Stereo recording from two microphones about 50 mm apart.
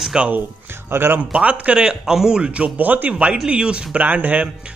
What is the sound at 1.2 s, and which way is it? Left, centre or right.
A man's voice, right.